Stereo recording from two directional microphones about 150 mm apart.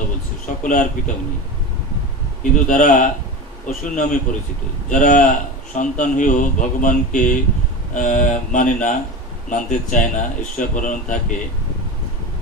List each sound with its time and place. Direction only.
0.7 s a man's voice: 60° left (ahead or behind)
2.5 s a man's voice: 60° left (ahead or behind)